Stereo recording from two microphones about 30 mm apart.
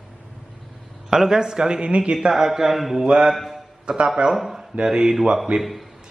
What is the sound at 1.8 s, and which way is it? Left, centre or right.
Speech, right.